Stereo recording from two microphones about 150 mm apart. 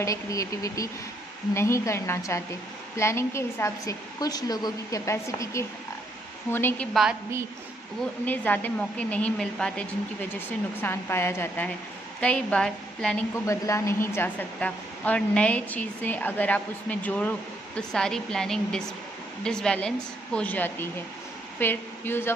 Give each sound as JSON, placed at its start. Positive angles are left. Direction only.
{"t": 0.0, "sound": "a woman's voice", "side_deg": 20}
{"t": 6.9, "sound": "a woman's voice", "side_deg": 0}
{"t": 8.3, "sound": "a woman's voice", "side_deg": 10}
{"t": 13.5, "sound": "a woman's voice", "side_deg": 20}